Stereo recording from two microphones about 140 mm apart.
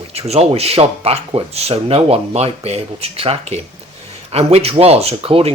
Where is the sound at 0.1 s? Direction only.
50° right (ahead or behind).